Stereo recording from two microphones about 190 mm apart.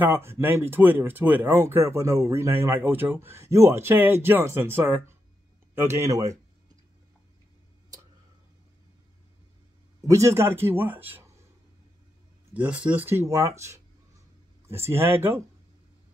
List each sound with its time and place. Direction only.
0.0 s speech: 10° right (ahead or behind)
10.0 s speech: 15° right (ahead or behind)
12.5 s speech: 5° right (ahead or behind)